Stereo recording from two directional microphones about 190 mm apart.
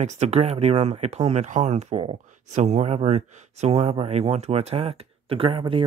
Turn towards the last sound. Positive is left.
turn(degrees=-30)  # may be behind; listen again after turning